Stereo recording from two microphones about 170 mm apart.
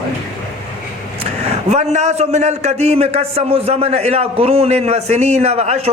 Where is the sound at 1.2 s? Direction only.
35° right (ahead or behind).